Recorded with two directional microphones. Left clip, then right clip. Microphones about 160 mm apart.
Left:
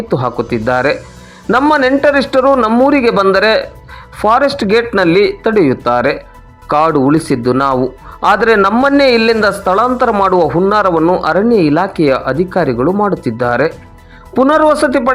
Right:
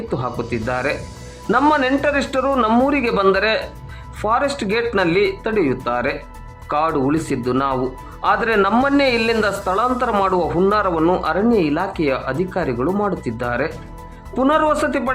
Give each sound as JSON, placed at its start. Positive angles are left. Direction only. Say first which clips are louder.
{"t": 0.1, "sound": "a man's voice", "louder": "left 9 dB", "side_deg": 30}
{"t": 2.6, "sound": "speech", "louder": "left 5 dB", "side_deg": 5}
{"t": 2.8, "sound": "a man's voice", "louder": "left 7 dB", "side_deg": 30}